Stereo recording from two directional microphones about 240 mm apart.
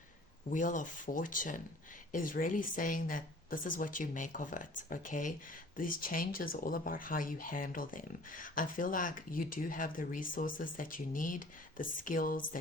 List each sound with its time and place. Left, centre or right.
0.5 s speech: left